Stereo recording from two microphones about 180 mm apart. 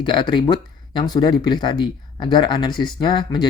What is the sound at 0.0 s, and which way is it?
Speech, 25° left (ahead or behind).